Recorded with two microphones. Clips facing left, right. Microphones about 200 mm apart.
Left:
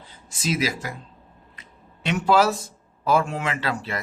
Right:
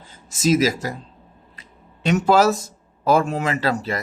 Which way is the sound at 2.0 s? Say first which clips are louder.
Right 4 dB; 45° right (ahead or behind).